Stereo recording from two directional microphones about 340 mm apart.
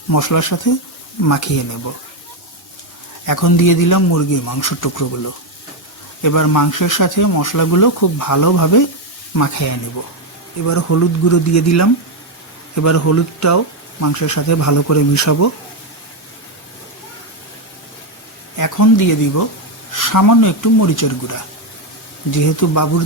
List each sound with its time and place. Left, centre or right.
0.1 s speech: left
3.2 s speech: left
6.2 s speech: left
18.5 s speech: left